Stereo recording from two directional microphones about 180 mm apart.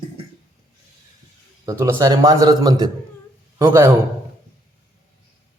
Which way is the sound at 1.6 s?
15° right (ahead or behind).